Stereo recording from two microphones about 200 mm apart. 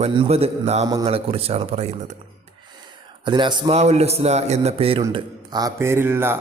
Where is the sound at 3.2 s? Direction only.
25° right (ahead or behind).